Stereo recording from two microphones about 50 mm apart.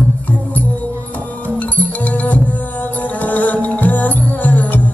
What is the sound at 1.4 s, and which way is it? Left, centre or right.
Music, left.